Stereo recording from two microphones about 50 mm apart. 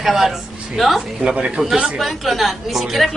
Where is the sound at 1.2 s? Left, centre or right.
Right.